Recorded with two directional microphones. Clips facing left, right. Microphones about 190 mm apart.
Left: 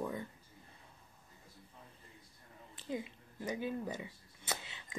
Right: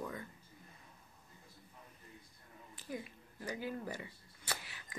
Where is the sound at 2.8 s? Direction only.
20° left (ahead or behind).